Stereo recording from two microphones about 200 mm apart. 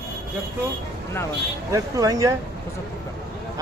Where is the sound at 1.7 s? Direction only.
15° right (ahead or behind).